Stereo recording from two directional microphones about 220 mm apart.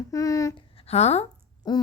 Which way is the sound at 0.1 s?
15° left (ahead or behind).